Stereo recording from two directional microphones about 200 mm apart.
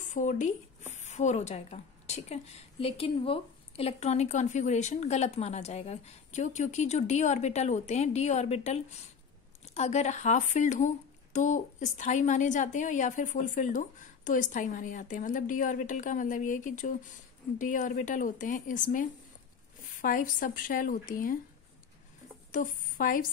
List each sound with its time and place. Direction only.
0.1 s a woman's voice: 40° left (ahead or behind)
22.5 s a woman's voice: 40° left (ahead or behind)